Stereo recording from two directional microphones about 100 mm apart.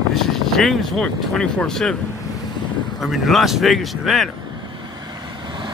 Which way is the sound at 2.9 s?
Centre (ahead or behind).